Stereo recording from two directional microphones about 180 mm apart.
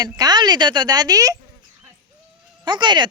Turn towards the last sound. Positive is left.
turn(degrees=-25)  # may be behind; listen again after turning